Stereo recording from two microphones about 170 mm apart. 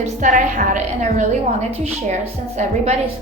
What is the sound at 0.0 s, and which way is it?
A woman's voice, 50° right (ahead or behind).